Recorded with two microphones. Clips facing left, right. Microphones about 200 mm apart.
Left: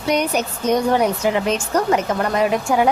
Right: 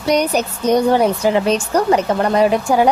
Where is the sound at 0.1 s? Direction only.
35° right (ahead or behind).